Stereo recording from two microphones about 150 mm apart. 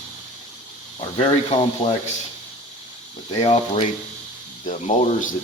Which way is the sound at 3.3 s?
40° left (ahead or behind).